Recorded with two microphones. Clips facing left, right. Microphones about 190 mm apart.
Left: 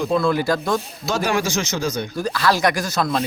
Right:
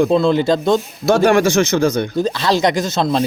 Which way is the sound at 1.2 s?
60° right (ahead or behind).